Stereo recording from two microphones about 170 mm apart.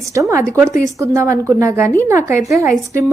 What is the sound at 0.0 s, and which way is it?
A woman's voice, 20° right (ahead or behind).